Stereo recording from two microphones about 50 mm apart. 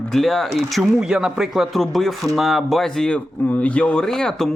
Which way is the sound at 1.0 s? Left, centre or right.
Centre.